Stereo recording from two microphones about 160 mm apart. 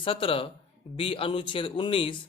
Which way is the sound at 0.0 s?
35° left (ahead or behind).